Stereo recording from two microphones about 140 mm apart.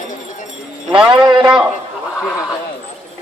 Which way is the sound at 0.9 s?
35° right (ahead or behind).